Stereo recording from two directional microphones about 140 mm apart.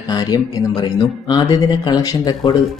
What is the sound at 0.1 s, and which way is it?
Speech, 30° left (ahead or behind).